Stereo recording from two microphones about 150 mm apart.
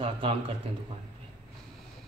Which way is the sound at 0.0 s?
35° right (ahead or behind).